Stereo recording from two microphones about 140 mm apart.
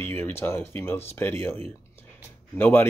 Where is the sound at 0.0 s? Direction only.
15° left (ahead or behind).